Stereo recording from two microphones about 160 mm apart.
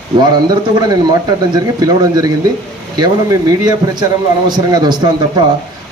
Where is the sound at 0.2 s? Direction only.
25° right (ahead or behind).